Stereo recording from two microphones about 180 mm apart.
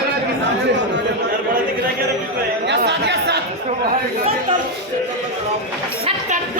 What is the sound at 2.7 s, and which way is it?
Chatter, 70° right (ahead or behind).